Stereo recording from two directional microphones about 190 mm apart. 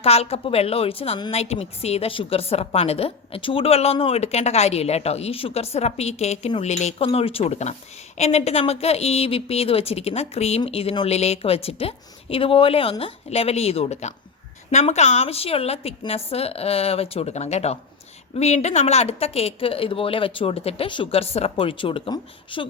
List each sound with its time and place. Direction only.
0.0 s a woman's voice: 30° left (ahead or behind)